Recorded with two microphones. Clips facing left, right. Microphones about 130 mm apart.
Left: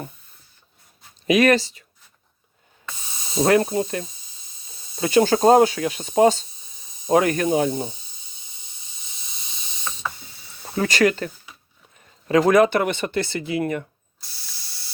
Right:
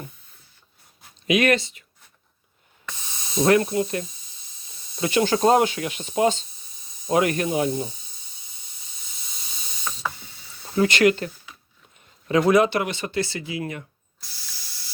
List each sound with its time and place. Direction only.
1.3 s speech: 40° left (ahead or behind)
3.4 s speech: 30° left (ahead or behind)
10.8 s speech: 40° left (ahead or behind)
12.3 s speech: 45° left (ahead or behind)